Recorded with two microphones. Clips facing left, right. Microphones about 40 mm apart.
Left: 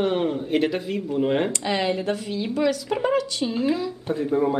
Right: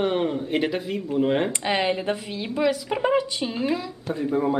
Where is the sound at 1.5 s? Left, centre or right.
Right.